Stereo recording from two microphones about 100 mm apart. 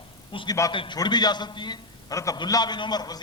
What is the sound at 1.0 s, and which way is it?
Speech, 45° left (ahead or behind).